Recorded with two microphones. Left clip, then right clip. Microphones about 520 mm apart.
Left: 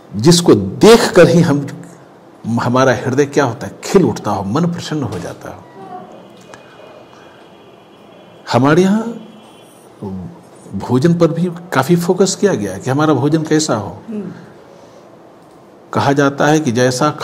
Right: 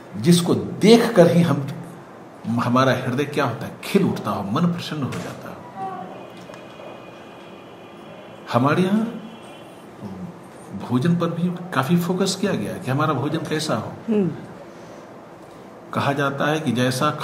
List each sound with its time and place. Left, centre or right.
0.2 s a man's voice: left
8.5 s a man's voice: left
10.8 s a man's voice: left
15.9 s a man's voice: left